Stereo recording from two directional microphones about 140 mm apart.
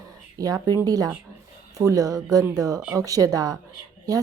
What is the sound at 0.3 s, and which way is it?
Speech, 25° right (ahead or behind).